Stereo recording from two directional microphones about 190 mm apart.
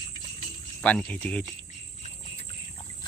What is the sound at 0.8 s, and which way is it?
Speech, 5° left (ahead or behind).